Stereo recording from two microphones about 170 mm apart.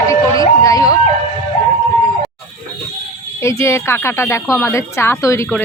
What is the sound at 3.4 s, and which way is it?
Speech, 15° left (ahead or behind).